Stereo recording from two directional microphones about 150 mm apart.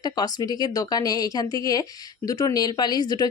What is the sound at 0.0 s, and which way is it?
A woman's voice, 25° left (ahead or behind).